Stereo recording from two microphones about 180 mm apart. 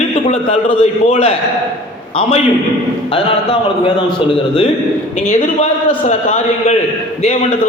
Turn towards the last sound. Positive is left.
turn(degrees=40)  # may be behind; listen again after turning